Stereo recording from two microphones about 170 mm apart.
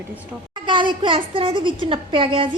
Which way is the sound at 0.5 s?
30° right (ahead or behind).